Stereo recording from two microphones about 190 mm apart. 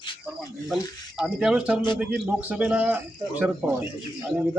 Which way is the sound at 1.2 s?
5° right (ahead or behind).